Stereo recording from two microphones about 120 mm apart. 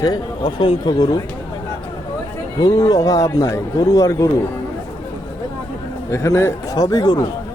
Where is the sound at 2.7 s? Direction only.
30° left (ahead or behind).